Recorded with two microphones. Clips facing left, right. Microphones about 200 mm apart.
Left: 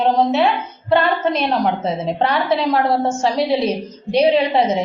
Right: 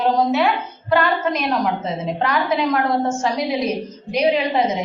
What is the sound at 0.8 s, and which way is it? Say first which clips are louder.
A woman's voice: left 2 dB; 30° left (ahead or behind).